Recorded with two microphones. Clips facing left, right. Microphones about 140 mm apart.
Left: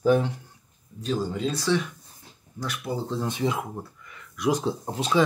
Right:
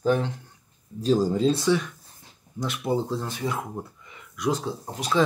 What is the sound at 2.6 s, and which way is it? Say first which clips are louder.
Speech: right 5 dB; 25° right (ahead or behind).